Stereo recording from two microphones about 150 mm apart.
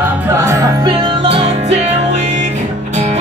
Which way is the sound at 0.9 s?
30° right (ahead or behind).